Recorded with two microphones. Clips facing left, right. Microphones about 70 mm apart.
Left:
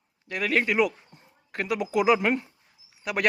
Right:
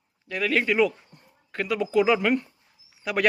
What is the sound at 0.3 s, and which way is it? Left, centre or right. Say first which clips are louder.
Speech: right 1 dB; centre.